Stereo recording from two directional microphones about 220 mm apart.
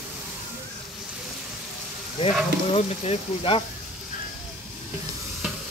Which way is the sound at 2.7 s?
25° left (ahead or behind).